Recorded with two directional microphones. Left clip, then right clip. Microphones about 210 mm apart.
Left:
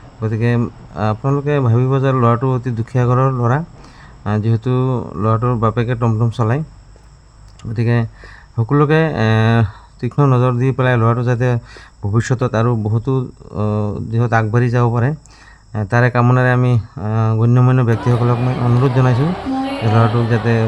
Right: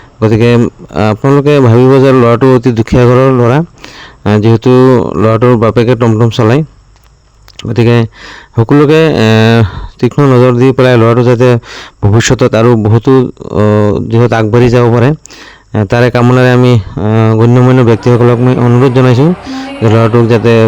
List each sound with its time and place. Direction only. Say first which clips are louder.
0.2 s speech: right 13 dB; 40° right (ahead or behind)
7.6 s speech: right 12 dB; 40° right (ahead or behind)